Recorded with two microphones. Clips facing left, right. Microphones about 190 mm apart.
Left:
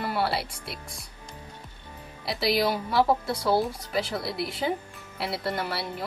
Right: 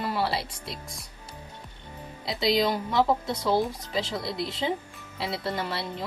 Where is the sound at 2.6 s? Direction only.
10° left (ahead or behind).